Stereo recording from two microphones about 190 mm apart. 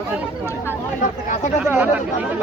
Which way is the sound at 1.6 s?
10° right (ahead or behind).